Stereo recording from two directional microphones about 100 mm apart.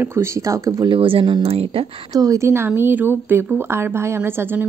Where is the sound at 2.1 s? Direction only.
35° right (ahead or behind).